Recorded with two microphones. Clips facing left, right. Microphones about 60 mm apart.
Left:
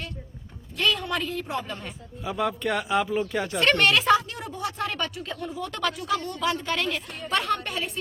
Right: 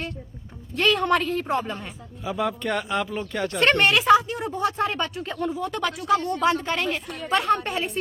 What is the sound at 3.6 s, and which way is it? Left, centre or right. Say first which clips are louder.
Speech: right 2 dB; right.